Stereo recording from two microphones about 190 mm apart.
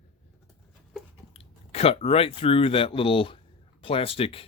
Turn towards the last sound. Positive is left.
turn(degrees=30)  # may be behind; listen again after turning